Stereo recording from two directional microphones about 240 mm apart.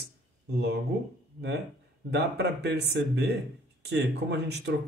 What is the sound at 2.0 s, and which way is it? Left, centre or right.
Speech, right.